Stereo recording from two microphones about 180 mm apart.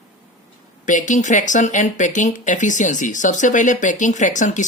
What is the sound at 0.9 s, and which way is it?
Speech, 45° left (ahead or behind).